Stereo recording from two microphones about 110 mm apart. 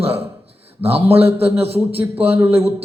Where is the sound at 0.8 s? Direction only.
20° right (ahead or behind).